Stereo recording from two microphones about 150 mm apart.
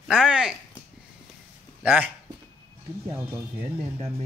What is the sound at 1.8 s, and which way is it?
Speech, 10° right (ahead or behind).